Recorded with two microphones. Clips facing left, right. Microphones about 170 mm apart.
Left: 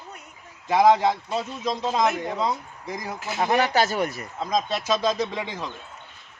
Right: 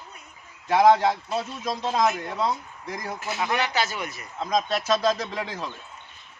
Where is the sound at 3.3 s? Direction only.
40° left (ahead or behind).